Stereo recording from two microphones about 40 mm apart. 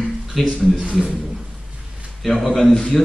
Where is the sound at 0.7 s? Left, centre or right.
Right.